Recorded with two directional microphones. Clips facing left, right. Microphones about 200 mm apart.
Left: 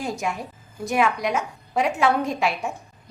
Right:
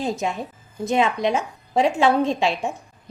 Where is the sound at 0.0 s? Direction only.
20° right (ahead or behind).